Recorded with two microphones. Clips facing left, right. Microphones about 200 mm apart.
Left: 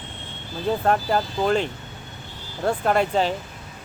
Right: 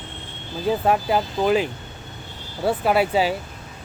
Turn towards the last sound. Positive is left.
turn(degrees=-5)  # may be behind; listen again after turning